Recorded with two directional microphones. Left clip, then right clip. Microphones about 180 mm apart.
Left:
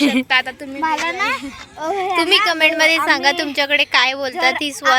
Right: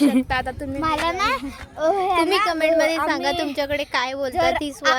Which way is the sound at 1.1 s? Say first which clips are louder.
Left 2 dB; 55° right (ahead or behind).